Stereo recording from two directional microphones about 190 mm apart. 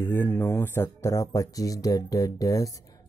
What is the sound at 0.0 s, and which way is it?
Speech, 10° left (ahead or behind).